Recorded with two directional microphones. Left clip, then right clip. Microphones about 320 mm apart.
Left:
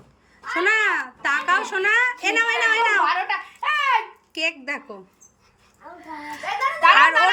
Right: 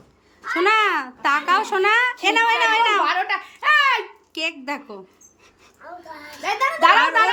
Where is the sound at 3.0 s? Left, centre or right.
Centre.